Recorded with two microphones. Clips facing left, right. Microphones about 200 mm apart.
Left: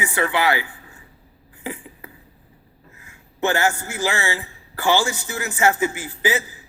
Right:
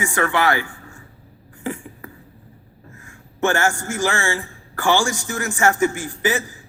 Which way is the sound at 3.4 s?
15° left (ahead or behind).